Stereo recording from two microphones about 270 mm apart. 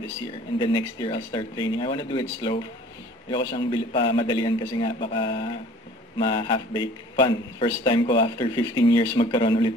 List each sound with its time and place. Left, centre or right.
0.6 s a man's voice: centre